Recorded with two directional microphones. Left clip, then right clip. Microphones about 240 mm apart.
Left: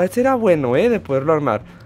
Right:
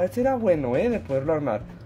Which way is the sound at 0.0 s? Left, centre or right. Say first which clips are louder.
Left 6 dB; left.